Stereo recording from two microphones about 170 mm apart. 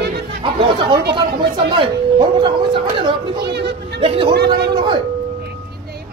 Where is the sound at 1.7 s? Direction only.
30° right (ahead or behind).